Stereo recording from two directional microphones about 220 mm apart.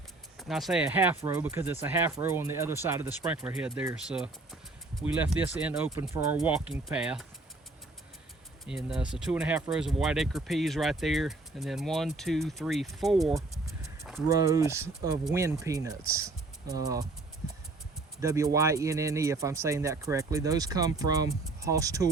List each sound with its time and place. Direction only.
0.3 s speech: centre (ahead or behind)
8.6 s speech: centre (ahead or behind)
13.5 s a sound: centre (ahead or behind)
14.3 s speech: 15° right (ahead or behind)
18.2 s speech: 15° right (ahead or behind)